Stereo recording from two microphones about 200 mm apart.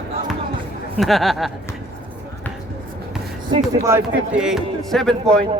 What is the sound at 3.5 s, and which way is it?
Speech, 15° right (ahead or behind).